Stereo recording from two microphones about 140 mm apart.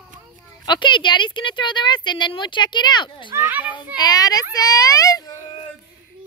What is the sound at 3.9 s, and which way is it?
A child's voice, 30° left (ahead or behind).